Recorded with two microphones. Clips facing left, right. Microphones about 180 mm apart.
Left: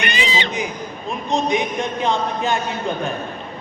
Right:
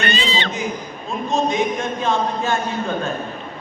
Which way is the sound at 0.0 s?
15° left (ahead or behind).